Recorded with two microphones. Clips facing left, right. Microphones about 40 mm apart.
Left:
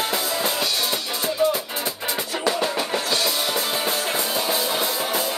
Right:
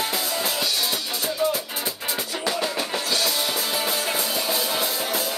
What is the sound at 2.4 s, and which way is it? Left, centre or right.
Music, centre.